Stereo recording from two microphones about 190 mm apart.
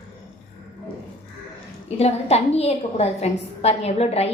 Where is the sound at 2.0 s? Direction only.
35° left (ahead or behind).